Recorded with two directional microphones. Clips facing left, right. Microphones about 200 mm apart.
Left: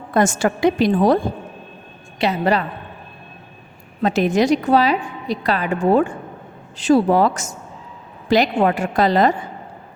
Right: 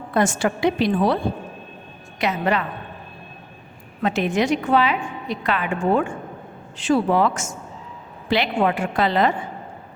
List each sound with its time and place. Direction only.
0.1 s a woman's voice: 45° left (ahead or behind)
2.1 s a woman's voice: 35° left (ahead or behind)
4.0 s a woman's voice: 40° left (ahead or behind)